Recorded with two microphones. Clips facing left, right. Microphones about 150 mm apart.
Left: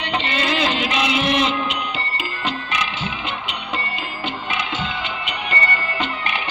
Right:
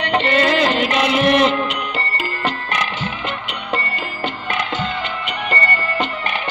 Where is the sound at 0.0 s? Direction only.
50° right (ahead or behind).